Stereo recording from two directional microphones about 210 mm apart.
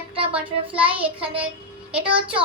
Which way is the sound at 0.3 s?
5° right (ahead or behind).